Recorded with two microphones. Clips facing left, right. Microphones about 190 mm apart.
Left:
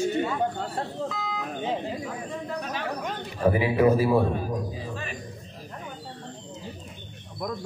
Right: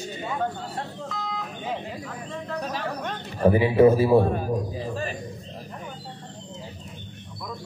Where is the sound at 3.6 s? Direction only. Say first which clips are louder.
Right 4 dB; 30° right (ahead or behind).